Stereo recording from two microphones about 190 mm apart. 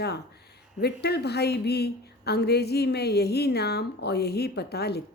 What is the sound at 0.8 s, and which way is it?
A woman's voice, 60° left (ahead or behind).